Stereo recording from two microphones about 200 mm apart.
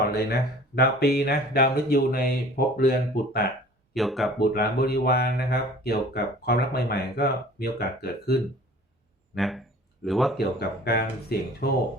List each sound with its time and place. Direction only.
0.0 s speech: 55° left (ahead or behind)
3.9 s speech: centre (ahead or behind)
4.4 s speech: 50° left (ahead or behind)
9.3 s speech: centre (ahead or behind)
10.6 s speech: 55° left (ahead or behind)